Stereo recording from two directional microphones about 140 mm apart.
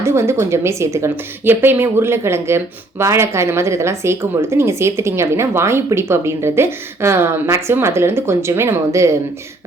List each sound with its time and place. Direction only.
0.0 s speech: 20° right (ahead or behind)